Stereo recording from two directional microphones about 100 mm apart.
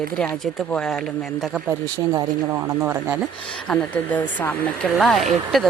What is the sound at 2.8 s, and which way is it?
Speech, 25° right (ahead or behind).